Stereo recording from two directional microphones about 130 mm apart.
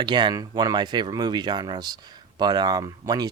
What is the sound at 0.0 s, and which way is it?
Speech, 35° right (ahead or behind).